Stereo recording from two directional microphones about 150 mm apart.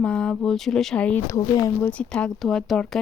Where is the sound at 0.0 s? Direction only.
5° left (ahead or behind).